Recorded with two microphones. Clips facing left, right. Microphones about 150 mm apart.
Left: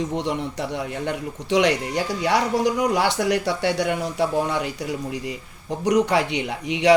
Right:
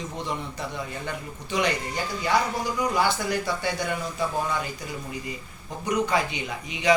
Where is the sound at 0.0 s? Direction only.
75° left (ahead or behind).